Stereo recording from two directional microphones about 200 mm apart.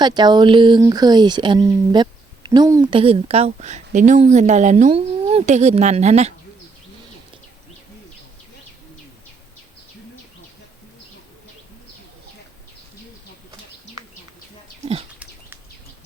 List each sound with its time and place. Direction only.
0.0 s speech: 20° right (ahead or behind)